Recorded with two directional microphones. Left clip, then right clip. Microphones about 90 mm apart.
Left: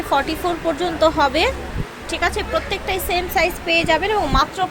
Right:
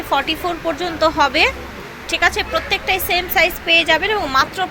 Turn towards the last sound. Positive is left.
turn(degrees=5)  # may be behind; listen again after turning